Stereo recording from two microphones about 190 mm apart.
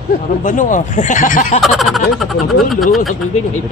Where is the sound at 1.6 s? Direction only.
Centre (ahead or behind).